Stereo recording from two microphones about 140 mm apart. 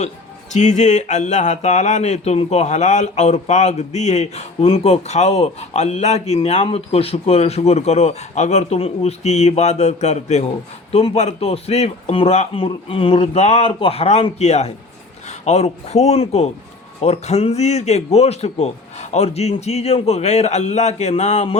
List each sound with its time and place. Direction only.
0.5 s speech: 60° left (ahead or behind)